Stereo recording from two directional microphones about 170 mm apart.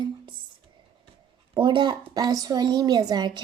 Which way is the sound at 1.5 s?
25° right (ahead or behind).